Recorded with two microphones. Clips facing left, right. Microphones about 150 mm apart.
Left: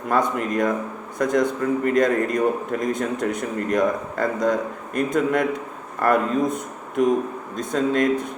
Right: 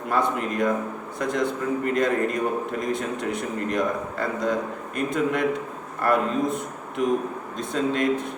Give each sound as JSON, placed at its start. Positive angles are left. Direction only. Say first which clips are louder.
{"t": 0.1, "sound": "a man's voice", "louder": "left 3 dB", "side_deg": 45}